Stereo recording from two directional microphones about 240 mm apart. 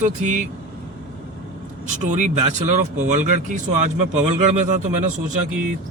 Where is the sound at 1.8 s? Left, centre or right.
Right.